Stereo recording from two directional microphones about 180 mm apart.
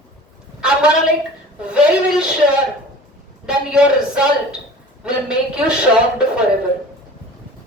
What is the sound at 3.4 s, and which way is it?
A woman's voice, 5° right (ahead or behind).